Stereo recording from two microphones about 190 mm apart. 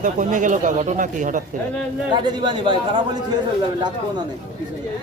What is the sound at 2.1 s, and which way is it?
Speech, 25° right (ahead or behind).